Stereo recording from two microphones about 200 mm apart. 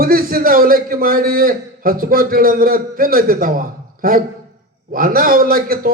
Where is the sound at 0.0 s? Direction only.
45° right (ahead or behind).